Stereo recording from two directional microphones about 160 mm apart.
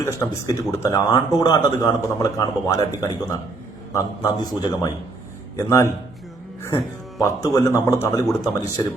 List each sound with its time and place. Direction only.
0.0 s a man's voice: 20° left (ahead or behind)
7.2 s a man's voice: 20° left (ahead or behind)